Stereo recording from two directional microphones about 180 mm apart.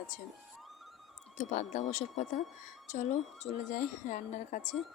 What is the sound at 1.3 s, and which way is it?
A woman's voice, 45° left (ahead or behind).